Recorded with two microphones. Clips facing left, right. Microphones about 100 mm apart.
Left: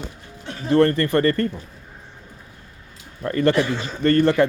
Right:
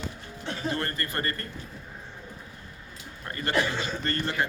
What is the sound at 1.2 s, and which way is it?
Speech, 15° right (ahead or behind).